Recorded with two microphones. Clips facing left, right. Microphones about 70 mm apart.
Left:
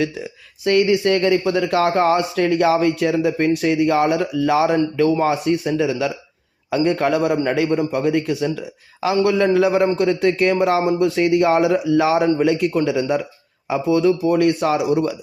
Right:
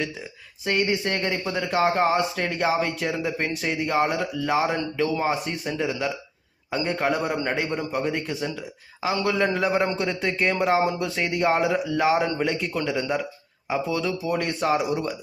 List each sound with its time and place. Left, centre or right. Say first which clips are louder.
0.6 s speech: left 8 dB; left
7.7 s a man's voice: left 7 dB; left
8.0 s speech: left 8 dB; left
13.8 s speech: left 14 dB; left